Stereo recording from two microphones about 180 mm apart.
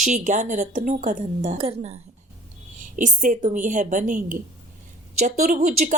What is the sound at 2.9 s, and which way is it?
A woman's voice, 45° right (ahead or behind).